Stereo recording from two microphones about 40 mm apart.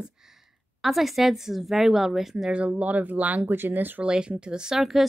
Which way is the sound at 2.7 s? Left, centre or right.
Right.